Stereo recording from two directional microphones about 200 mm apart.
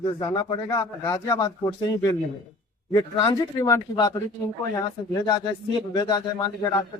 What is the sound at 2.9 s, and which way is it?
Speech, 20° left (ahead or behind).